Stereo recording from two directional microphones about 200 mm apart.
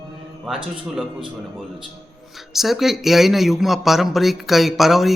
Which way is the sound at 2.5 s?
Centre (ahead or behind).